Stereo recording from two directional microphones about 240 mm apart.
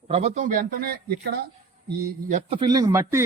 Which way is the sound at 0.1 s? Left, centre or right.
Right.